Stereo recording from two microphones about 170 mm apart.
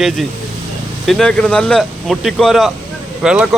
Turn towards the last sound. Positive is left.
turn(degrees=-5)  # may be behind; listen again after turning